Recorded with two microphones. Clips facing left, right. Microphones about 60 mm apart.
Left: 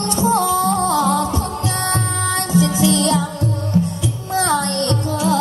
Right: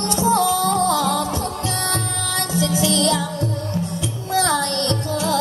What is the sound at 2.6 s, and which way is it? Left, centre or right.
Music, left.